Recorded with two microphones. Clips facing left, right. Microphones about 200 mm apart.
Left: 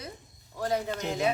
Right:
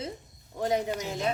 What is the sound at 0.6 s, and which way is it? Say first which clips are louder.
Speech: right 2 dB; 20° right (ahead or behind).